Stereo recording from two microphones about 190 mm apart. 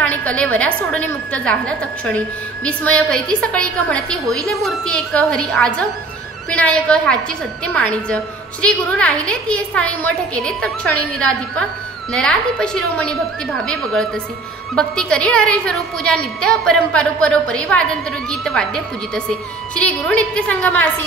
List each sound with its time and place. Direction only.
0.0 s a woman's voice: 10° left (ahead or behind)
12.1 s a woman's voice: 5° left (ahead or behind)